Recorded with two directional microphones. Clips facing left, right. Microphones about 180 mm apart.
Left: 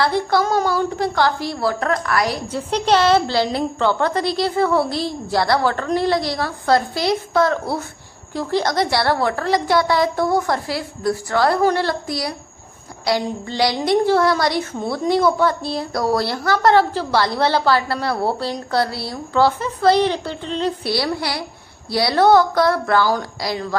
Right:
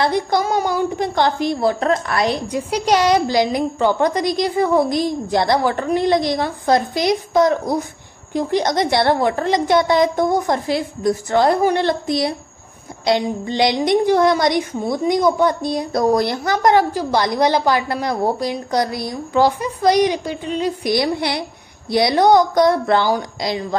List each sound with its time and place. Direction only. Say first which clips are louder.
0.0 s a woman's voice: even; 20° right (ahead or behind)